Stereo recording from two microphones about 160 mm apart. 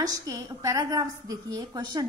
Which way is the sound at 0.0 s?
20° right (ahead or behind).